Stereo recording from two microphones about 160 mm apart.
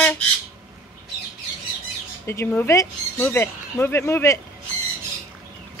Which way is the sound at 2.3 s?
15° left (ahead or behind).